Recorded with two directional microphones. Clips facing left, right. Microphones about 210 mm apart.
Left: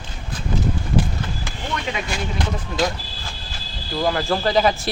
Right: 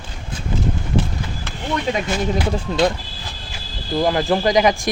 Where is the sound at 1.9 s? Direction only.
40° right (ahead or behind).